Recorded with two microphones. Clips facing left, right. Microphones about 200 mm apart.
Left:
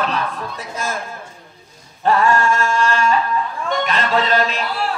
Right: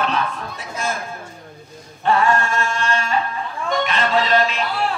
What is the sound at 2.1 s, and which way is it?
Speech, 40° left (ahead or behind).